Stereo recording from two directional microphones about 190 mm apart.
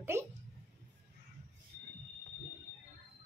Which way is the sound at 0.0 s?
15° right (ahead or behind).